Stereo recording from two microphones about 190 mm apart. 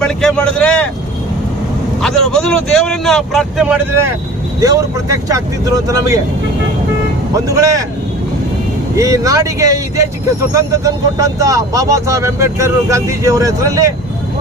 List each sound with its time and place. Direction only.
0.0 s speech: 5° left (ahead or behind)
2.0 s speech: centre (ahead or behind)
4.6 s speech: 20° right (ahead or behind)
7.3 s speech: 15° right (ahead or behind)
9.0 s speech: 15° right (ahead or behind)